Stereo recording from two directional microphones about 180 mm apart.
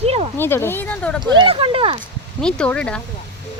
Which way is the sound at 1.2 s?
30° right (ahead or behind).